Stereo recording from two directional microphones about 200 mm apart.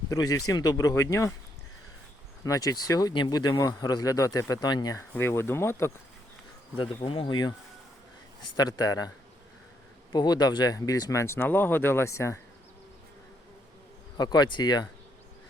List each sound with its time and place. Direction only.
0.1 s speech: 15° left (ahead or behind)
2.4 s speech: 15° left (ahead or behind)
6.7 s speech: 25° left (ahead or behind)
8.5 s speech: 20° left (ahead or behind)
14.2 s speech: 20° left (ahead or behind)